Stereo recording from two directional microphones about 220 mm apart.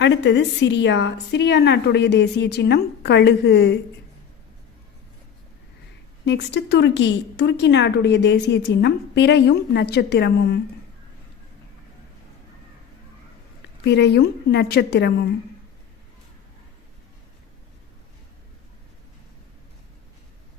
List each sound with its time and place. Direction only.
0.0 s speech: 55° left (ahead or behind)
6.2 s speech: 50° left (ahead or behind)
13.8 s speech: 50° left (ahead or behind)